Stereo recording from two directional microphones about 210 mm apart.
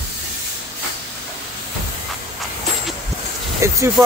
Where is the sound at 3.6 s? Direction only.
15° right (ahead or behind).